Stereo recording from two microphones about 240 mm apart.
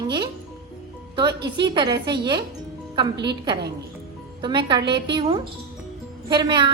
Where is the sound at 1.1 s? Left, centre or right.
Centre.